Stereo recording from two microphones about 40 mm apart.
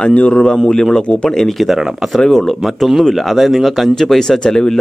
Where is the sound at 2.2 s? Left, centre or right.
Centre.